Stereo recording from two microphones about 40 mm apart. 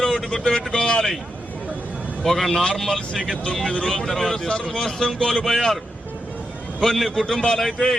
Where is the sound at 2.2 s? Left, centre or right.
Centre.